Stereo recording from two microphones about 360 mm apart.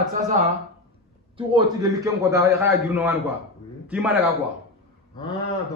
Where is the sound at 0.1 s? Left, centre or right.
Right; by 4.3 s centre.